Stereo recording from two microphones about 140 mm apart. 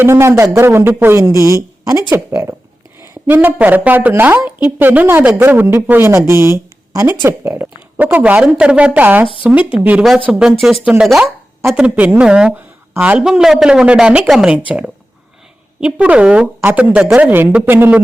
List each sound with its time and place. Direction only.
0.0 s speech: 20° right (ahead or behind)
15.8 s speech: 10° right (ahead or behind)